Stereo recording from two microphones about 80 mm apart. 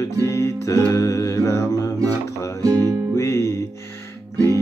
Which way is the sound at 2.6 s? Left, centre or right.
Right.